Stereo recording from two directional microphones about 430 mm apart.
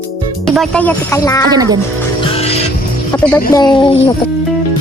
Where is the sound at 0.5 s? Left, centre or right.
Centre.